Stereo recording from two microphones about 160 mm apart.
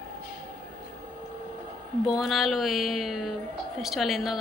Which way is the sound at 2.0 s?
Centre (ahead or behind).